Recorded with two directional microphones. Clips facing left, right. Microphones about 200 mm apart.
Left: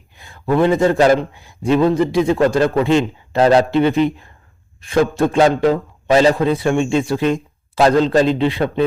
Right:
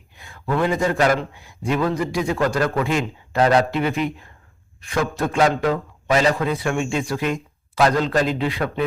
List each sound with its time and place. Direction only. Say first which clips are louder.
0.2 s speech: left 6 dB; 30° left (ahead or behind)